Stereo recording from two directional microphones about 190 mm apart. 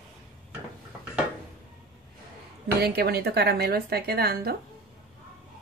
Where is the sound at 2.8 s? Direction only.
55° right (ahead or behind).